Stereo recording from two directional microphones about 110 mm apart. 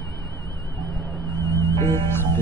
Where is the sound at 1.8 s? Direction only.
25° left (ahead or behind).